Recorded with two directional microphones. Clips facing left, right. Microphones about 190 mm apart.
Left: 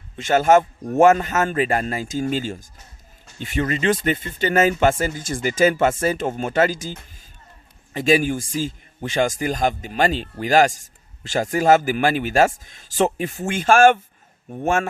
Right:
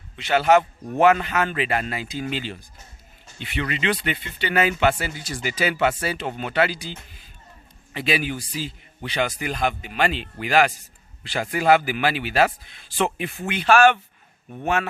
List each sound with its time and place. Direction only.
0.2 s a man's voice: 45° left (ahead or behind)